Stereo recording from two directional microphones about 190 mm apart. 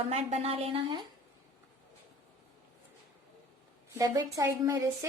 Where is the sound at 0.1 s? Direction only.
35° right (ahead or behind).